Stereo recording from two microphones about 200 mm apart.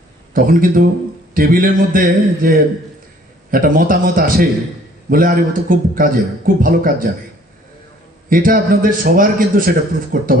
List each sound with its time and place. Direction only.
0.3 s a man's voice: 45° right (ahead or behind)
8.3 s a man's voice: 45° right (ahead or behind)